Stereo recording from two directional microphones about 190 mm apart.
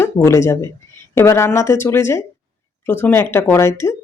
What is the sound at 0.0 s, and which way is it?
Speech, 15° left (ahead or behind).